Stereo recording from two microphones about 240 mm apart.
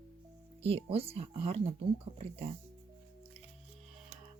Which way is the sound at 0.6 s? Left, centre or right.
Right.